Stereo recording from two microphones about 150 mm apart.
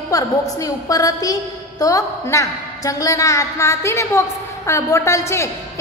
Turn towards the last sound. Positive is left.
turn(degrees=20)  # may be behind; listen again after turning